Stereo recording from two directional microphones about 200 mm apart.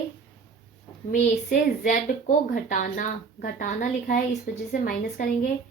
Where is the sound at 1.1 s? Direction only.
40° left (ahead or behind).